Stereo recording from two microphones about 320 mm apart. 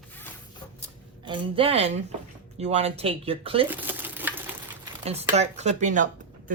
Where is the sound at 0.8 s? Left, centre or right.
Centre.